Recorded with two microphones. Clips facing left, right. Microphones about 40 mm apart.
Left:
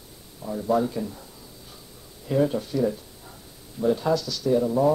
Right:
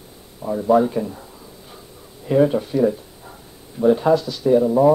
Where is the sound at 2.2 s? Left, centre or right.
Right.